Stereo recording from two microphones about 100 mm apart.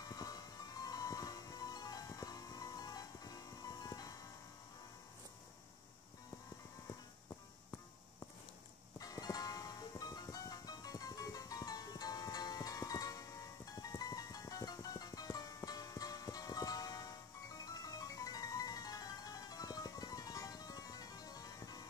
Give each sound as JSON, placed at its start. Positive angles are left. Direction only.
{"t": 0.0, "sound": "music", "side_deg": 40}
{"t": 8.9, "sound": "music", "side_deg": 35}